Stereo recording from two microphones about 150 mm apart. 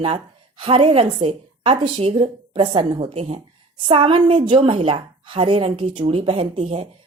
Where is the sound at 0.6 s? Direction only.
35° right (ahead or behind).